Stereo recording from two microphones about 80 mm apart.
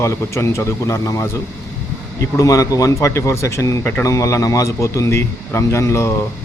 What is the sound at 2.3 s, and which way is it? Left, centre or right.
Speech, left.